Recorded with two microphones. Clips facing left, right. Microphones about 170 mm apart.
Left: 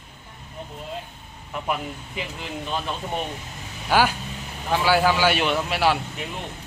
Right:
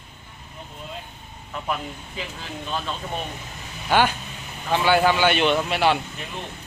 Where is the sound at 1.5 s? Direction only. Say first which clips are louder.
Left 1 dB; 15° left (ahead or behind).